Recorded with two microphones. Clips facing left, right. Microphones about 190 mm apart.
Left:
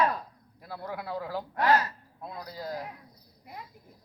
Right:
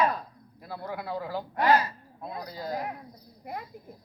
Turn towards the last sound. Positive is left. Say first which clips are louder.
# right 7 dB
turn(degrees=-60)  # may be behind; listen again after turning